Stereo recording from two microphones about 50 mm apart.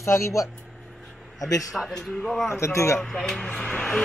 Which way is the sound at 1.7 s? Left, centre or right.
Centre.